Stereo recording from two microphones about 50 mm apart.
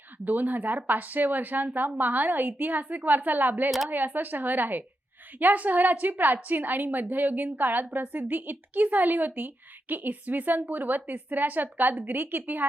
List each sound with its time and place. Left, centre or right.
0.3 s a woman's voice: right